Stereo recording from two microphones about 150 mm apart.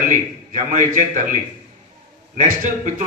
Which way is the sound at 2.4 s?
60° right (ahead or behind).